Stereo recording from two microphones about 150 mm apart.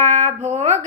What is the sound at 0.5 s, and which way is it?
Speech, 55° right (ahead or behind).